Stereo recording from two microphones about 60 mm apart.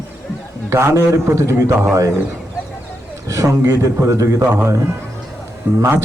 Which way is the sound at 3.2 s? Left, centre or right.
Right.